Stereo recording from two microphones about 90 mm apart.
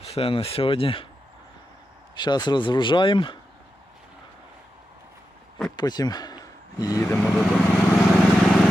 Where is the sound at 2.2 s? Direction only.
55° left (ahead or behind).